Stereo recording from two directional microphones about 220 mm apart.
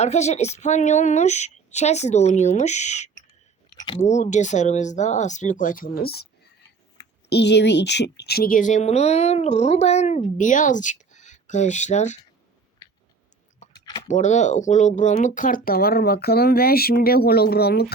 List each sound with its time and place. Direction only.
0.0 s speech: 30° left (ahead or behind)
7.3 s speech: 50° left (ahead or behind); by 12.2 s 30° left (ahead or behind)
13.7 s a sound: 20° left (ahead or behind)
14.1 s speech: 30° left (ahead or behind)